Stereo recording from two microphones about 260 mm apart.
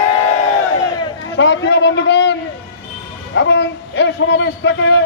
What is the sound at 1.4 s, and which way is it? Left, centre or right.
Speech, left.